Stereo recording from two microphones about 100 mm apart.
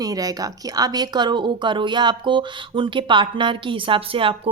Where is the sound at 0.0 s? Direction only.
35° right (ahead or behind).